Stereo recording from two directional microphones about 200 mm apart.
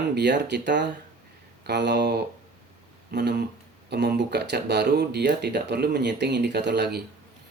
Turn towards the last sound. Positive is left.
turn(degrees=-55)  # may be behind; listen again after turning